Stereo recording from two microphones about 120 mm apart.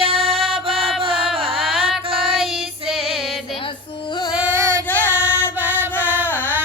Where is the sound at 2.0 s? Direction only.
50° right (ahead or behind).